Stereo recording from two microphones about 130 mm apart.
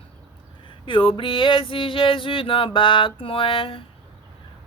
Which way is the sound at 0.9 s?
40° left (ahead or behind).